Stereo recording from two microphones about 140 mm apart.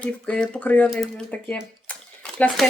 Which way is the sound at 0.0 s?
10° left (ahead or behind).